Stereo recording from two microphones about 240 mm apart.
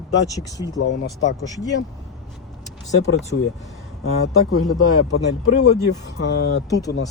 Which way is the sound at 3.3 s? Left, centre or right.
Left.